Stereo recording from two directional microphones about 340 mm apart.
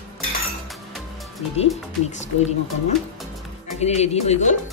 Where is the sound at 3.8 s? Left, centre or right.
Centre.